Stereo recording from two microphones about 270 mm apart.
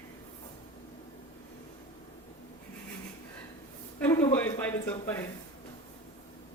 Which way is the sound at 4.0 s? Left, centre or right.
Centre.